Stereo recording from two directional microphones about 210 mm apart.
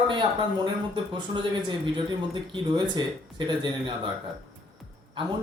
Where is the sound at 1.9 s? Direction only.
20° right (ahead or behind).